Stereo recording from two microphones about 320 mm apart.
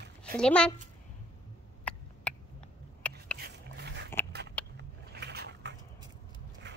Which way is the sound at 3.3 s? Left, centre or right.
Right.